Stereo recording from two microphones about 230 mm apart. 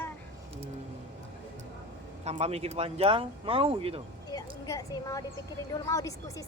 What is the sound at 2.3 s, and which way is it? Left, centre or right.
Speech, right.